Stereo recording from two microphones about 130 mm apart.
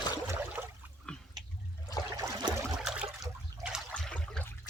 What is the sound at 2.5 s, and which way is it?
Trickle, 5° right (ahead or behind).